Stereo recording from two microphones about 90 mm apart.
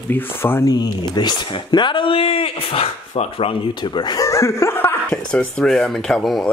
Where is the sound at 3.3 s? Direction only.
75° left (ahead or behind); by 4.3 s 50° left (ahead or behind).